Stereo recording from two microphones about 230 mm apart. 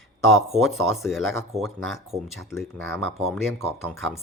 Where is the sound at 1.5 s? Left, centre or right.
Right.